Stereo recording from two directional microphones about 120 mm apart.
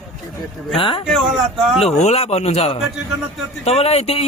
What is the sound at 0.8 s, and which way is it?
Speech, 45° left (ahead or behind).